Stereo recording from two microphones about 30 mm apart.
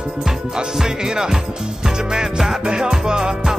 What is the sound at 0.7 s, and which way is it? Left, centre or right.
Music, centre.